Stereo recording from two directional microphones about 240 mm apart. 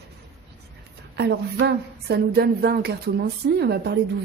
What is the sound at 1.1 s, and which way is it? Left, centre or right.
A woman's voice, right.